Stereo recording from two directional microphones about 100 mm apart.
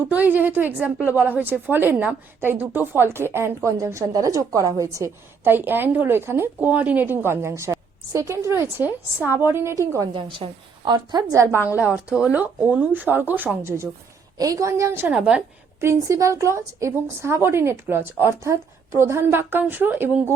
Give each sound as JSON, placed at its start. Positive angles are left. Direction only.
{"t": 0.0, "sound": "a woman's voice", "side_deg": -15}
{"t": 5.4, "sound": "a woman's voice", "side_deg": -20}
{"t": 10.1, "sound": "a woman's voice", "side_deg": -55}
{"t": 14.3, "sound": "a woman's voice", "side_deg": -35}
{"t": 15.0, "sound": "a woman's voice", "side_deg": -10}
{"t": 15.8, "sound": "a woman's voice", "side_deg": -30}